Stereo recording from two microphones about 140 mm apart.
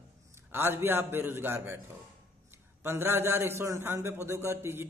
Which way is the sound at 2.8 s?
15° right (ahead or behind).